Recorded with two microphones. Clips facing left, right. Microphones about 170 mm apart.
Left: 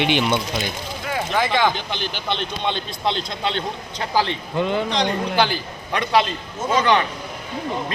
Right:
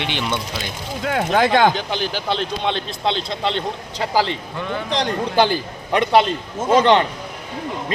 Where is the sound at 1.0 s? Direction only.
65° right (ahead or behind).